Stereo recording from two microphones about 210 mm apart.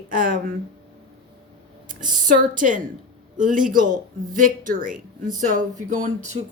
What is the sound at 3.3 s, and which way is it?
Speech, 40° right (ahead or behind).